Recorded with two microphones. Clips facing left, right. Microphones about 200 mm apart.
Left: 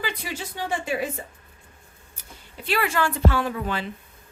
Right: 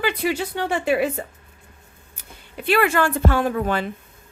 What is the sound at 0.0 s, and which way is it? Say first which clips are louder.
Speech: right 9 dB; 65° right (ahead or behind).